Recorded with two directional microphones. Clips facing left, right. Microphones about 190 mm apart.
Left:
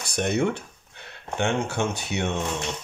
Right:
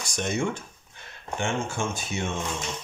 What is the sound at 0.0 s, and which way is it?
Speech, 60° left (ahead or behind).